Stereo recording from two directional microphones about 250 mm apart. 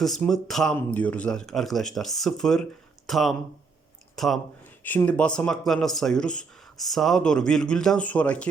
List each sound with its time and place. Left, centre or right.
0.0 s speech: centre